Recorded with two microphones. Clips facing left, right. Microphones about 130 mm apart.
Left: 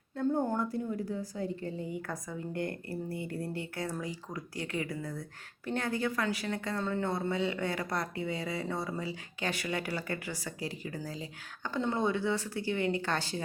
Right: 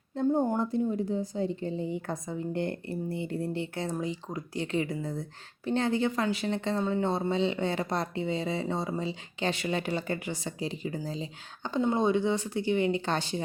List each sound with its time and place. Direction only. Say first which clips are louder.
0.2 s a woman's voice: right 4 dB; 20° right (ahead or behind)